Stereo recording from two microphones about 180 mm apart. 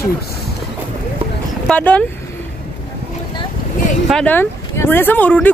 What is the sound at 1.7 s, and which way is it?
Speech, 10° left (ahead or behind).